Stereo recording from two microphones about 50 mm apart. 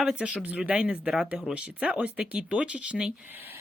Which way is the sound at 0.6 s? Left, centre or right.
Centre.